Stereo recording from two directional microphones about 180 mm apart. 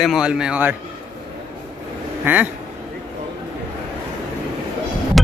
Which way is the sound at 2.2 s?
10° right (ahead or behind).